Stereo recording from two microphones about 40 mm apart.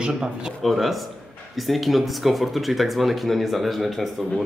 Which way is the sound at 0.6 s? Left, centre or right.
Centre.